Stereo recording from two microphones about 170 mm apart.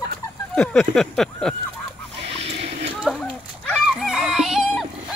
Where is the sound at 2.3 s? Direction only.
35° right (ahead or behind).